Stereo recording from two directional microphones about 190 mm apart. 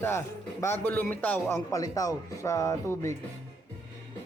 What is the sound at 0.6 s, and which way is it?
A man's voice, 10° left (ahead or behind).